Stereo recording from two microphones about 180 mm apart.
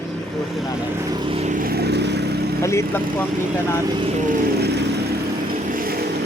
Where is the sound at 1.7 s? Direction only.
65° right (ahead or behind).